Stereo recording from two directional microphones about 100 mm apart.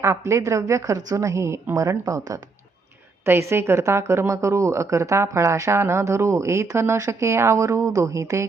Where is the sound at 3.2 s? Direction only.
25° right (ahead or behind).